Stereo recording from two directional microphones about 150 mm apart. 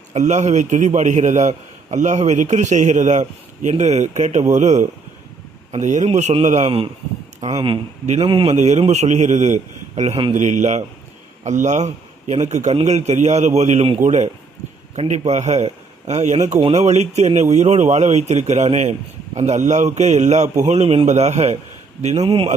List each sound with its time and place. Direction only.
0.1 s speech: 50° right (ahead or behind)
6.7 s speech: 35° right (ahead or behind)
8.5 s speech: 50° right (ahead or behind)
10.3 s speech: 50° right (ahead or behind)
14.0 s a man's voice: 55° right (ahead or behind)